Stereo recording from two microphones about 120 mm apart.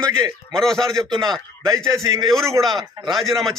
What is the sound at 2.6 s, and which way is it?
Speech, centre (ahead or behind).